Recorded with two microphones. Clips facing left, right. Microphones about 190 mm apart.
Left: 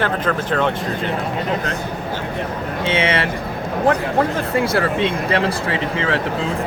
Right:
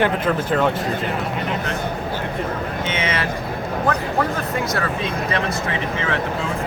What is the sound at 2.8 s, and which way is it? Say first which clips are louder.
Speech: left 7 dB; 30° left (ahead or behind).